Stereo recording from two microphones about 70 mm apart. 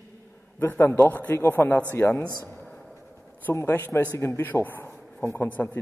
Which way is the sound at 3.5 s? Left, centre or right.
Left.